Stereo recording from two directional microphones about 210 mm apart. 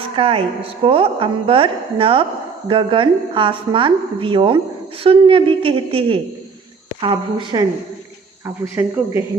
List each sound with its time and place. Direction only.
0.2 s a woman's voice: 25° right (ahead or behind)
8.4 s speech: 10° right (ahead or behind)